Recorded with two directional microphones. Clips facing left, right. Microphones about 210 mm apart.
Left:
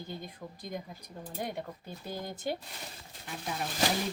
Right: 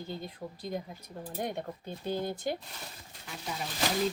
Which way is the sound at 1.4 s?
10° left (ahead or behind).